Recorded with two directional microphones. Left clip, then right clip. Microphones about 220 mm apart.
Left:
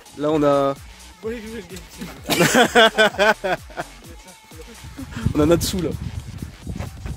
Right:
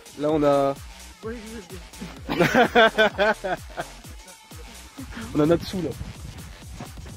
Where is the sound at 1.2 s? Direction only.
40° left (ahead or behind).